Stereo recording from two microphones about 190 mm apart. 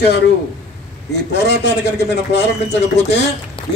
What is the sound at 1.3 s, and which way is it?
A woman's voice, 65° left (ahead or behind).